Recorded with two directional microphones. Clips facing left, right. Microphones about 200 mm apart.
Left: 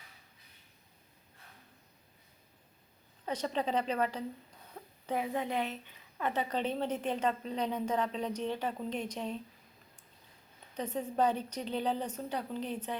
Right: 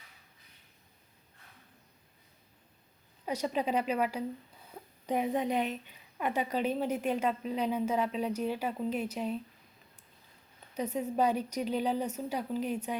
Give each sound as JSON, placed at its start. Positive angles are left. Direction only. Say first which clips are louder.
{"t": 3.2, "sound": "a woman's voice", "louder": "right 2 dB", "side_deg": -10}
{"t": 10.8, "sound": "a woman's voice", "louder": "right 2 dB", "side_deg": -10}